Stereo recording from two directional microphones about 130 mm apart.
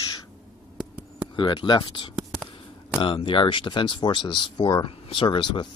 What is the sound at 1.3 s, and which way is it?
Speech, 35° left (ahead or behind).